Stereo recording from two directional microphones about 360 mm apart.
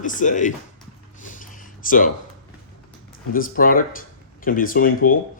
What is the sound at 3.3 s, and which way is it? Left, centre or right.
Speech, left.